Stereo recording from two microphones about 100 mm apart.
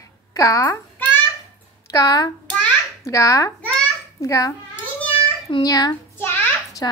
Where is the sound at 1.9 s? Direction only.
40° left (ahead or behind).